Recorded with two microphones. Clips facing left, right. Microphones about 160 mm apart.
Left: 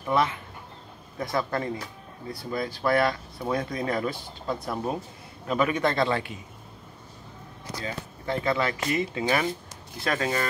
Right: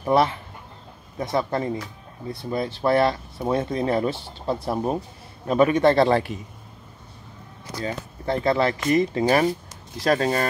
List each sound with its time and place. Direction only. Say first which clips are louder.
0.0 s speech: right 5 dB; 30° right (ahead or behind)
7.8 s speech: right 6 dB; 35° right (ahead or behind)